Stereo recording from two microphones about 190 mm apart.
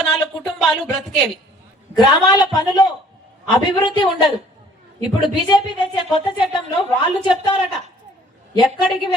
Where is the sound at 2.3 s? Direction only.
20° left (ahead or behind).